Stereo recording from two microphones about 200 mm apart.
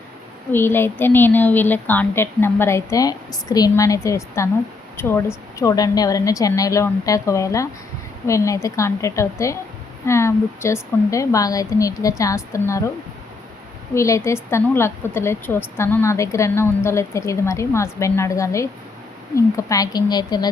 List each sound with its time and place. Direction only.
0.5 s a woman's voice: 10° left (ahead or behind)
13.9 s a woman's voice: 15° left (ahead or behind)